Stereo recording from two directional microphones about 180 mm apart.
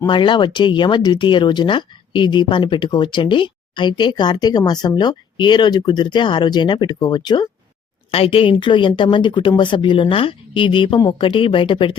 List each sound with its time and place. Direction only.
0.1 s speech: 25° left (ahead or behind)